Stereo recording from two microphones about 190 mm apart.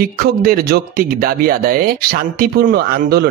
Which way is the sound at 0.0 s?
50° right (ahead or behind).